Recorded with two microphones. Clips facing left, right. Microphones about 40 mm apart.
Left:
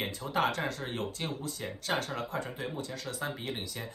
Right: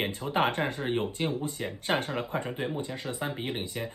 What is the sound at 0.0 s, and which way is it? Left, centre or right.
Speech, right.